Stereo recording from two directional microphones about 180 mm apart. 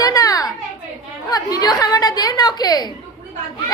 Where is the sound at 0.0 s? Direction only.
20° left (ahead or behind).